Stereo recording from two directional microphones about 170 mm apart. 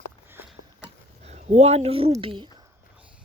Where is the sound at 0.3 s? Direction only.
10° right (ahead or behind).